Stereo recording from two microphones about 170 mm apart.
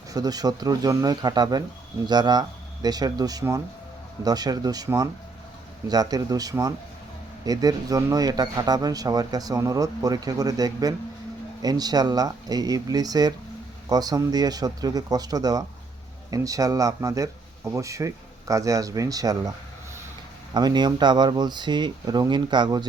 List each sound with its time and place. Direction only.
0.1 s speech: 20° right (ahead or behind)
20.5 s speech: 25° right (ahead or behind)